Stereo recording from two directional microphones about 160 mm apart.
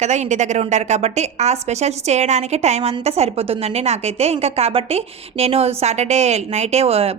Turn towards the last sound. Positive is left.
turn(degrees=-40)  # may be behind; listen again after turning